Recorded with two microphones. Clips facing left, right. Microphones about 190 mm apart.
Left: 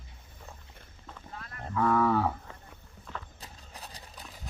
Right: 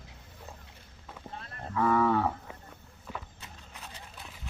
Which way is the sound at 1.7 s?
Centre (ahead or behind).